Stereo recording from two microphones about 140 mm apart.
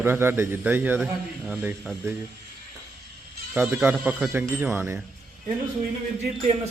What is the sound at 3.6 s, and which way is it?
Speech, 15° right (ahead or behind).